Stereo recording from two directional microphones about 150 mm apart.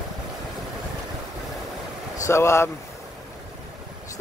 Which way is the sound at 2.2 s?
20° left (ahead or behind).